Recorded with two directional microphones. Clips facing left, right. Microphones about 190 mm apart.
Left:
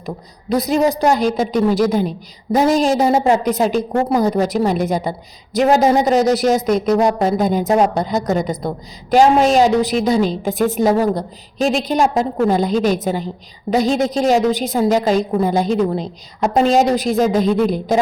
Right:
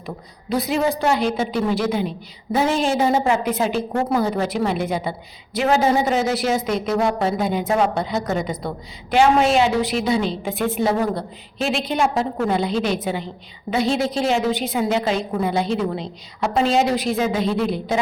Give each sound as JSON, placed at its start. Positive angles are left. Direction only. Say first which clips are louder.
{"t": 0.5, "sound": "a woman's voice", "louder": "left 5 dB", "side_deg": 40}